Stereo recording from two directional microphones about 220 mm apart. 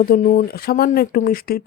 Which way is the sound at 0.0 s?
40° left (ahead or behind).